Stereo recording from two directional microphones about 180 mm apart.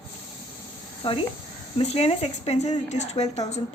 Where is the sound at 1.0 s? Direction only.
30° left (ahead or behind).